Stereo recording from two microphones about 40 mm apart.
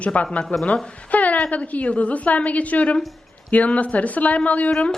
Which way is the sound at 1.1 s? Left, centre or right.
Left.